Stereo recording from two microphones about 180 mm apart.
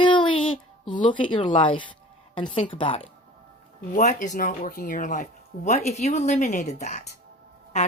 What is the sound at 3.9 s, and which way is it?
Speech, 45° left (ahead or behind).